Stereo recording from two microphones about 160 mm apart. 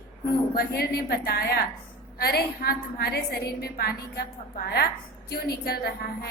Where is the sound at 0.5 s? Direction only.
80° left.